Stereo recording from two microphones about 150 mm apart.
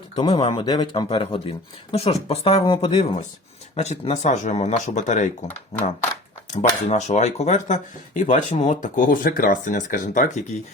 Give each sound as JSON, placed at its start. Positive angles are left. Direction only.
{"t": 0.2, "sound": "speech", "side_deg": 40}
{"t": 0.6, "sound": "speech", "side_deg": 30}
{"t": 6.5, "sound": "speech", "side_deg": 50}